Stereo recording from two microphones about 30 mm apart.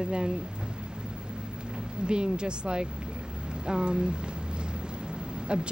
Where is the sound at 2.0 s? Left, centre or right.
Right.